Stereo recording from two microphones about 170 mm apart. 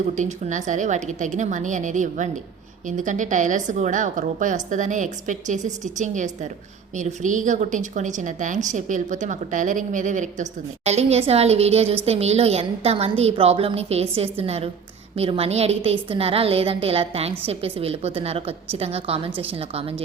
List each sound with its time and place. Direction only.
0.2 s a woman's voice: 45° right (ahead or behind)